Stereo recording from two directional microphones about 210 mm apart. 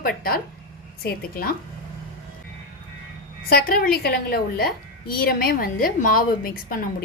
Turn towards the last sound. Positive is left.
turn(degrees=40)  # may be behind; listen again after turning